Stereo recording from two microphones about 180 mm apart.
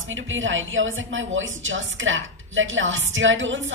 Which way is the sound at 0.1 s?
90° right.